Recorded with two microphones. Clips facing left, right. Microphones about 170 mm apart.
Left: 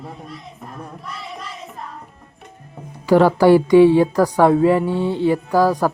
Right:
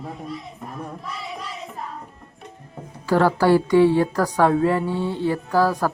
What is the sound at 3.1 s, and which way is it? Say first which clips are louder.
Speech: left 5 dB; 15° left (ahead or behind).